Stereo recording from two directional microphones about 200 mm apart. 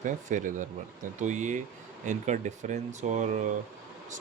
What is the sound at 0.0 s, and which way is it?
Speech, 40° right (ahead or behind).